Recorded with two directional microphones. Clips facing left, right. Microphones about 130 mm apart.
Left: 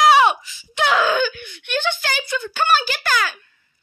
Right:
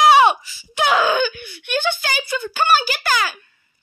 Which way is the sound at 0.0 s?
Centre (ahead or behind).